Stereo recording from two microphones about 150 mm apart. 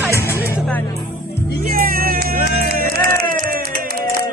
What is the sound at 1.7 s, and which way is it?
Music, 75° right (ahead or behind).